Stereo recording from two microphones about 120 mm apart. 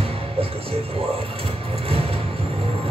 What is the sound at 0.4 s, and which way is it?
Music, 50° right (ahead or behind).